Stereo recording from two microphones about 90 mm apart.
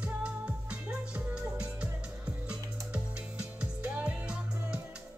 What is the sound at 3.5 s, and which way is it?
Music, 15° right (ahead or behind).